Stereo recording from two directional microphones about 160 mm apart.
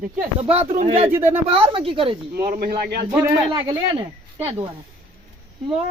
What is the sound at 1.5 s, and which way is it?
Speech, 35° right (ahead or behind).